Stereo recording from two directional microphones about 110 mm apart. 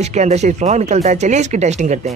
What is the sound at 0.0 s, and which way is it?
Speech, 85° right.